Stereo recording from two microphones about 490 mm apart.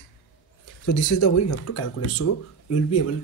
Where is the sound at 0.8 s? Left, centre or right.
Left.